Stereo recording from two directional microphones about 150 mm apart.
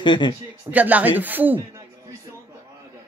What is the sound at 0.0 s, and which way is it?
Speech, 30° left (ahead or behind).